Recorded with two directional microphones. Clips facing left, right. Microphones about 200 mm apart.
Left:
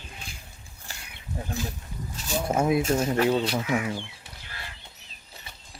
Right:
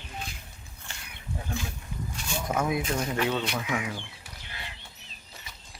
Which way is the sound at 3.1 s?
35° left (ahead or behind).